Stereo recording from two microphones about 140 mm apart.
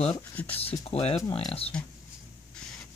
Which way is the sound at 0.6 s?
45° left (ahead or behind).